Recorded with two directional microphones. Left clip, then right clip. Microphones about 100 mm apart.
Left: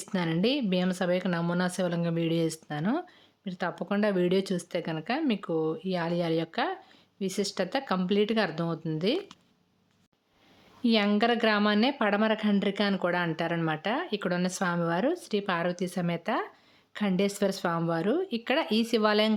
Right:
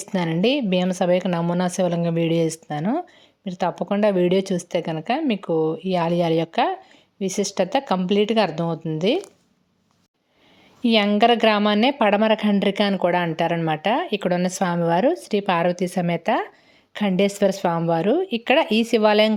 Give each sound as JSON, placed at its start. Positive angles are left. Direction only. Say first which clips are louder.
{"t": 0.0, "sound": "a sound", "louder": "right 7 dB", "side_deg": -35}
{"t": 0.4, "sound": "speech", "louder": "right 9 dB", "side_deg": -30}
{"t": 10.8, "sound": "speech", "louder": "right 9 dB", "side_deg": -35}